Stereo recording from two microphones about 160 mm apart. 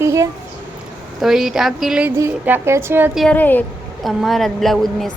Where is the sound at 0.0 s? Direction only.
20° right (ahead or behind).